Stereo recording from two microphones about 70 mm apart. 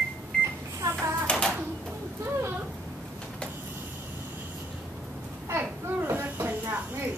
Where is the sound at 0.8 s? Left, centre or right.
Right.